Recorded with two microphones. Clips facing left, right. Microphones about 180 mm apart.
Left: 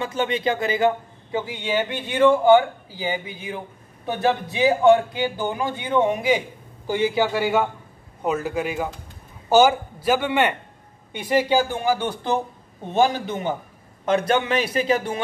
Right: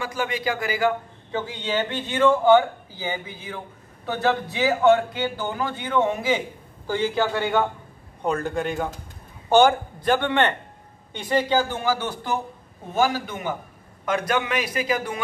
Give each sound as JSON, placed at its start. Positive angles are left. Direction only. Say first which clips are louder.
{"t": 0.0, "sound": "a man's voice", "louder": "left 3 dB", "side_deg": 25}
{"t": 1.3, "sound": "a man's voice", "louder": "left 2 dB", "side_deg": 10}